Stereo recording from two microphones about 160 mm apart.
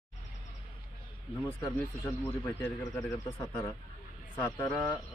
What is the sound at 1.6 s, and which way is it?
Speech, 20° left (ahead or behind).